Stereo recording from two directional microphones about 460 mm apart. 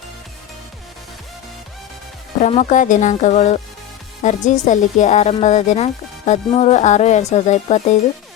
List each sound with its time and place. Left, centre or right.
2.4 s a woman's voice: centre